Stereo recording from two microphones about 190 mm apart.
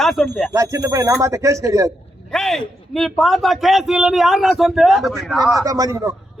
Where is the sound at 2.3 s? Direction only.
Centre (ahead or behind).